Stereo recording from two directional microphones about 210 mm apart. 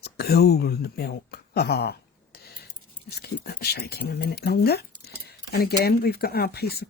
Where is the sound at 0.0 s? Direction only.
50° left (ahead or behind).